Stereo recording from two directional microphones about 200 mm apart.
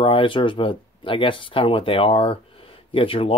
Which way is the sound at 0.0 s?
25° left (ahead or behind).